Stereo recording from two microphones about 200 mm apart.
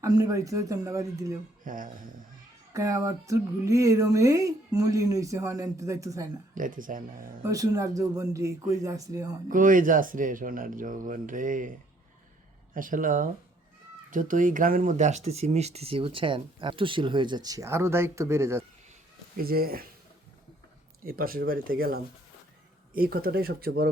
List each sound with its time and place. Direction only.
0.0 s speech: 15° right (ahead or behind)
1.6 s speech: 45° right (ahead or behind)
2.7 s speech: 15° right (ahead or behind)
6.5 s speech: 40° right (ahead or behind)
7.5 s speech: 15° right (ahead or behind)
9.5 s speech: 40° right (ahead or behind)
12.7 s speech: 40° right (ahead or behind); by 18.6 s 15° right (ahead or behind)
19.4 s speech: 50° right (ahead or behind)
21.0 s speech: 45° right (ahead or behind)